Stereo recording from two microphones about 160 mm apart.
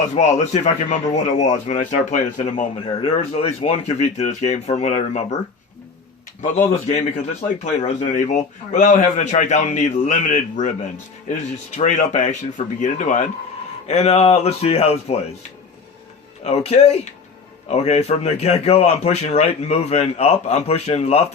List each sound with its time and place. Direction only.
0.1 s a man's voice: 45° left (ahead or behind)
2.8 s a man's voice: 35° left (ahead or behind)
7.4 s a man's voice: 50° left (ahead or behind)
11.8 s a man's voice: 45° left (ahead or behind)
16.4 s a man's voice: 45° left (ahead or behind)